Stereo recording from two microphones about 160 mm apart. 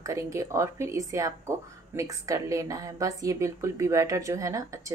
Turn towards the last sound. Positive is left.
turn(degrees=-20)  # may be behind; listen again after turning